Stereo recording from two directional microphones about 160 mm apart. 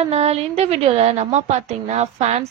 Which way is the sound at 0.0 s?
40° right (ahead or behind).